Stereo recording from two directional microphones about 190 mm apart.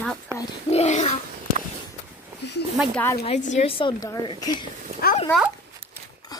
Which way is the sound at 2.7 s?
Centre (ahead or behind).